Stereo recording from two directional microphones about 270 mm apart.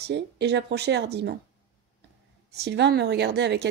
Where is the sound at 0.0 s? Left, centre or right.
Right.